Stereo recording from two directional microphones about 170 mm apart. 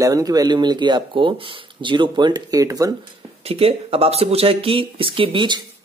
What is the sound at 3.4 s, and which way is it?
Speech, 35° right (ahead or behind).